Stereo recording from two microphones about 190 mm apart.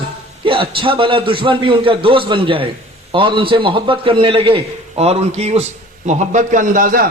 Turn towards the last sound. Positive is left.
turn(degrees=-45)  # may be behind; listen again after turning